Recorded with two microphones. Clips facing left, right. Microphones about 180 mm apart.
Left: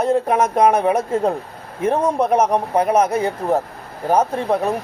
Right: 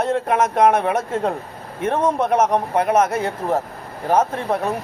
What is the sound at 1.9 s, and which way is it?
Speech, 35° left (ahead or behind).